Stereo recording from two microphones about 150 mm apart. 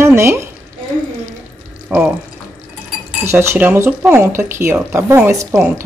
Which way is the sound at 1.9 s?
10° right (ahead or behind).